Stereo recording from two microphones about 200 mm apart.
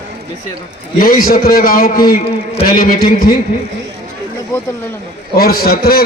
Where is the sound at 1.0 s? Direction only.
45° left (ahead or behind).